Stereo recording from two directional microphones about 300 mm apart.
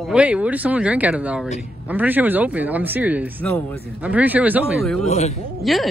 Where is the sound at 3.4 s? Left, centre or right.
Centre.